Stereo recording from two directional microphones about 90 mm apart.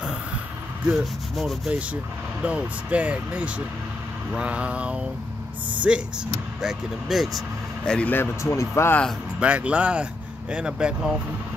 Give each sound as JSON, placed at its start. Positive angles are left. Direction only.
{"t": 0.8, "sound": "speech", "side_deg": -5}
{"t": 2.4, "sound": "speech", "side_deg": -15}
{"t": 8.1, "sound": "speech", "side_deg": 25}
{"t": 9.4, "sound": "speech", "side_deg": -15}